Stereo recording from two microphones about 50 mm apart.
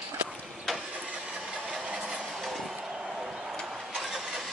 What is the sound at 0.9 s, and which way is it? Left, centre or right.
Vehicle, centre.